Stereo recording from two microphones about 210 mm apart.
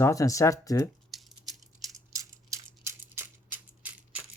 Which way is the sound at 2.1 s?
15° right (ahead or behind).